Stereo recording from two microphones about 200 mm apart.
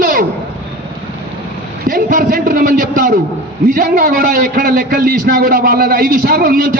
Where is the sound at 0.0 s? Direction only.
45° right (ahead or behind).